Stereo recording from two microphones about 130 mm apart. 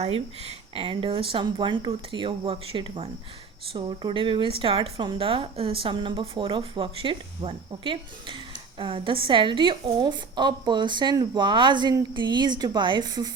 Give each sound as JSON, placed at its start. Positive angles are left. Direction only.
{"t": 0.0, "sound": "speech", "side_deg": -50}